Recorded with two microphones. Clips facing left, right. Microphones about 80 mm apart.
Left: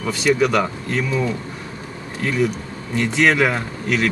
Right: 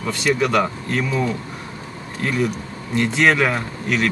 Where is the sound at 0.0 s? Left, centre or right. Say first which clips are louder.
Left 2 dB; centre.